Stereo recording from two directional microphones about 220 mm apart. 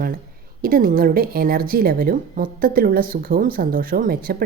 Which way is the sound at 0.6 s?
40° right (ahead or behind).